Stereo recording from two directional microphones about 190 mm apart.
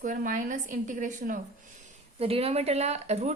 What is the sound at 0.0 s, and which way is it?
A woman's voice, 45° right (ahead or behind).